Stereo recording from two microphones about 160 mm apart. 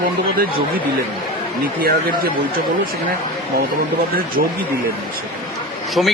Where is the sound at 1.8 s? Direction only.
70° right (ahead or behind).